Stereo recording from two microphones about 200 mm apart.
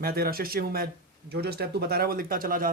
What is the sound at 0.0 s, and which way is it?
A man's voice, 50° right (ahead or behind).